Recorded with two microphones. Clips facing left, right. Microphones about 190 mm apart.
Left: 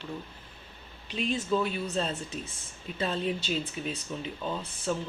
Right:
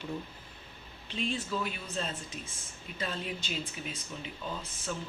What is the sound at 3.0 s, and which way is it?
Speech, 30° left (ahead or behind).